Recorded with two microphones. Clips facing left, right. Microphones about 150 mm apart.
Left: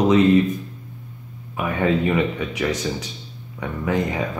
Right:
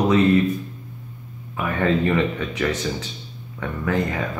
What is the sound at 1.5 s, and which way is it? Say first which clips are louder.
Speech: left 1 dB; 15° left (ahead or behind).